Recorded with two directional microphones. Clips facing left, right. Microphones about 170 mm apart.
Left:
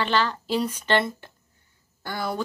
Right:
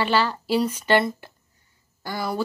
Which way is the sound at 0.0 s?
10° right (ahead or behind).